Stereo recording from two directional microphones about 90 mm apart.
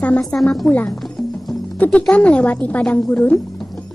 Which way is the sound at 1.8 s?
15° left (ahead or behind).